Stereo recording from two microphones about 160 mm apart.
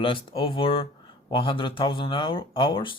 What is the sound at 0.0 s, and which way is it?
Speech, 35° left (ahead or behind).